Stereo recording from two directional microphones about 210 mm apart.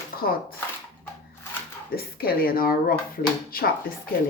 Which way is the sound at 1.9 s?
45° left (ahead or behind).